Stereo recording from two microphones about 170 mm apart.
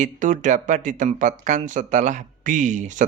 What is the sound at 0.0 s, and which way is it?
Speech, 50° right (ahead or behind).